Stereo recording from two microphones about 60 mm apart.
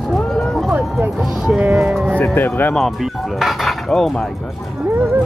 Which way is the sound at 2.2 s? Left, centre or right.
Left.